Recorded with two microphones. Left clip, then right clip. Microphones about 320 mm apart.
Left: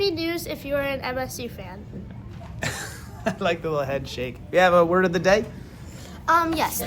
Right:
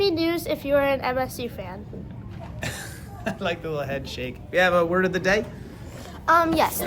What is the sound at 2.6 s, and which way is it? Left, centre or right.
Speech, left.